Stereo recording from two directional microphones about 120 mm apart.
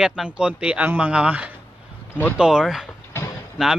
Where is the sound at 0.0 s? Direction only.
5° right (ahead or behind).